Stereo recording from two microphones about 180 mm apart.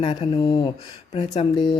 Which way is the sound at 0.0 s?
35° left (ahead or behind).